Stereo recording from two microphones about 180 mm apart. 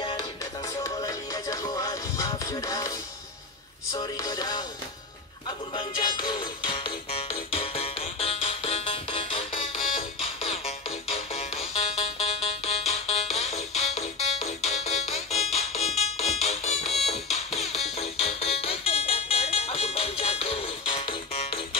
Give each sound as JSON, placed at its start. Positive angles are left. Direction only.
{"t": 0.0, "sound": "music", "side_deg": 25}
{"t": 3.9, "sound": "music", "side_deg": 20}
{"t": 5.8, "sound": "music", "side_deg": 25}